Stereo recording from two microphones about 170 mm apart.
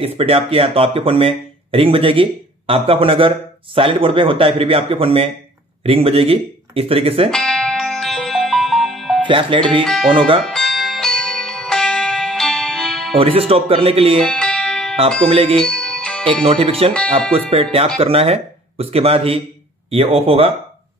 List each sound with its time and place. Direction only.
0.0 s speech: 35° right (ahead or behind)
7.2 s music: 5° left (ahead or behind)
9.2 s speech: 30° right (ahead or behind)
10.4 s music: centre (ahead or behind)
13.2 s speech: 35° right (ahead or behind)
14.2 s music: 5° left (ahead or behind)
15.2 s speech: 35° right (ahead or behind)
15.6 s music: 5° left (ahead or behind)
16.4 s speech: 35° right (ahead or behind)
16.9 s speech: 5° left (ahead or behind)
17.5 s speech: 35° right (ahead or behind)